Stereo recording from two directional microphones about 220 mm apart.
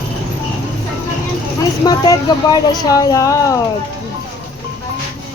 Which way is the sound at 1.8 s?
15° left (ahead or behind).